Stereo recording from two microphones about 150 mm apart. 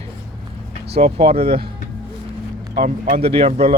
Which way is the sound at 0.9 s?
40° right (ahead or behind).